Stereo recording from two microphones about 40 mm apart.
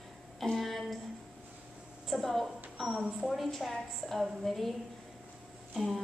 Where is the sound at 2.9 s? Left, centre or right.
Centre.